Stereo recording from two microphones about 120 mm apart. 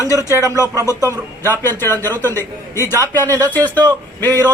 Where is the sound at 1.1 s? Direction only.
20° left (ahead or behind).